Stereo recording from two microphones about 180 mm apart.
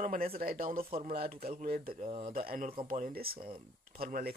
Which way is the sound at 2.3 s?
50° right (ahead or behind).